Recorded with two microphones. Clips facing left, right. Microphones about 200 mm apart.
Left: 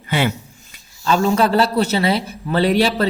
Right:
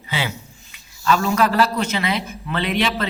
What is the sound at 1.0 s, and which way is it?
A man's voice, 30° left (ahead or behind).